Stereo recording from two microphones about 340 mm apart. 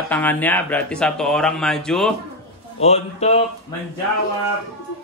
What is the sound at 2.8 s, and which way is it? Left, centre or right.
Speech, centre.